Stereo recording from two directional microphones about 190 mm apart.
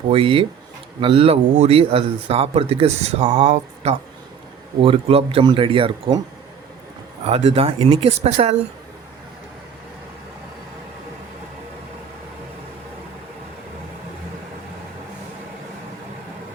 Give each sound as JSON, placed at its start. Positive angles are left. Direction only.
{"t": 0.1, "sound": "speech", "side_deg": -30}
{"t": 7.3, "sound": "speech", "side_deg": -30}